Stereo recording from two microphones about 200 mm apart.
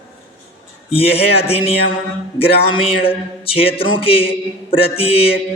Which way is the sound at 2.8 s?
30° left (ahead or behind).